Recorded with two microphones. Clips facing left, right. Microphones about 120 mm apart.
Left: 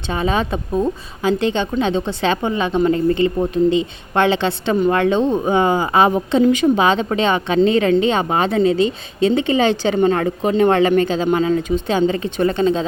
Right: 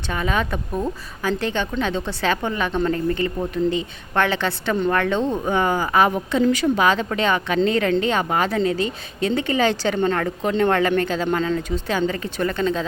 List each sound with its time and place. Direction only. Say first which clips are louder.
0.1 s speech: left 4 dB; 25° left (ahead or behind)